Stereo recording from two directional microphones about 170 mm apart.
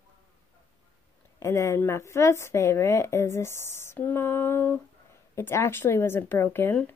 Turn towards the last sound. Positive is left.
turn(degrees=10)  # may be behind; listen again after turning